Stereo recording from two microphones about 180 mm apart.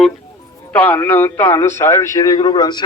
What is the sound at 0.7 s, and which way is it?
A man's voice, 10° left (ahead or behind).